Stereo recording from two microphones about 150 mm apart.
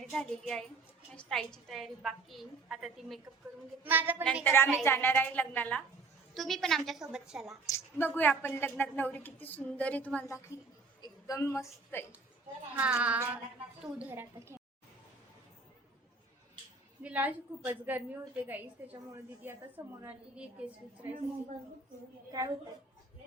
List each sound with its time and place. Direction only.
0.1 s a woman's voice: 5° left (ahead or behind); by 4.2 s 10° right (ahead or behind)
4.4 s a woman's voice: 15° left (ahead or behind); by 7.6 s centre (ahead or behind)
7.7 s a woman's voice: 15° left (ahead or behind)
12.7 s a woman's voice: 10° right (ahead or behind)
17.0 s a woman's voice: 10° right (ahead or behind)